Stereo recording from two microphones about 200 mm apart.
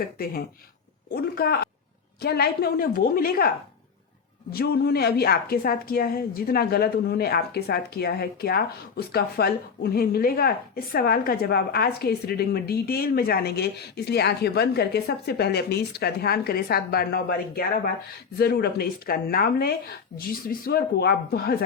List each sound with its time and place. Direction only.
0.0 s a woman's voice: 50° left (ahead or behind)
4.5 s a woman's voice: 50° left (ahead or behind)